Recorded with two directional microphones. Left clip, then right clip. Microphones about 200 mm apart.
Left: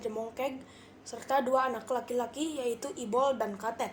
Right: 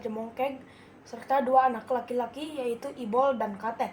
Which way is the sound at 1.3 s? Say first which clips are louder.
Right 5 dB; 25° left (ahead or behind).